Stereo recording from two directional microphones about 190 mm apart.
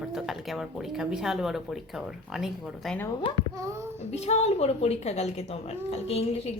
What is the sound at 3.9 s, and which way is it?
A woman's voice, 35° left (ahead or behind).